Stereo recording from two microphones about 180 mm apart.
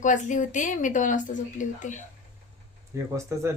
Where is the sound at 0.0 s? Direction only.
45° left (ahead or behind).